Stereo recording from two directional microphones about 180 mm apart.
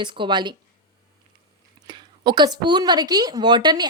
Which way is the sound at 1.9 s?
25° right (ahead or behind).